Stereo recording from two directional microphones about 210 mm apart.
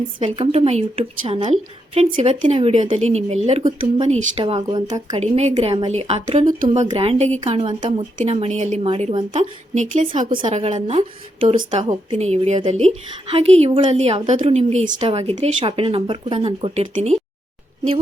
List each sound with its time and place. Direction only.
0.3 s a woman's voice: 30° right (ahead or behind)
3.6 s speech: 15° right (ahead or behind)
4.0 s a woman's voice: 30° right (ahead or behind)
5.9 s a woman's voice: 30° right (ahead or behind)